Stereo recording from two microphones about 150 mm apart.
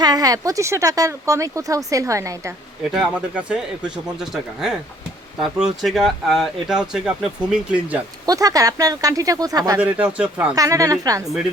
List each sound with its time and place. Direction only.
0.0 s speech: 25° right (ahead or behind)
2.9 s speech: 5° right (ahead or behind)
8.3 s speech: 25° right (ahead or behind)
9.7 s speech: 10° right (ahead or behind)
10.5 s speech: 25° right (ahead or behind)